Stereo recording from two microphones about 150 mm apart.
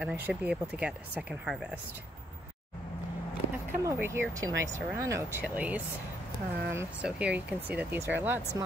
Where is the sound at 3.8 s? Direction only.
15° right (ahead or behind).